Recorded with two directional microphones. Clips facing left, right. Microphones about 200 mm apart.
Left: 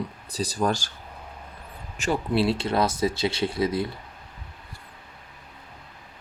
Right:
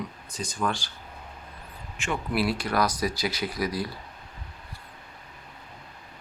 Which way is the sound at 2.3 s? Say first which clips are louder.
Left 2 dB; 25° left (ahead or behind).